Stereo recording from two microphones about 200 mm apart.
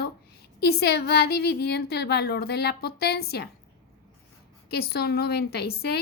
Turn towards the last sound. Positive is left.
turn(degrees=50)  # may be behind; listen again after turning